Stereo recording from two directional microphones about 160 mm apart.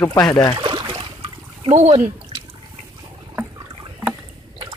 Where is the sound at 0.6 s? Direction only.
25° right (ahead or behind); by 2.0 s 45° right (ahead or behind).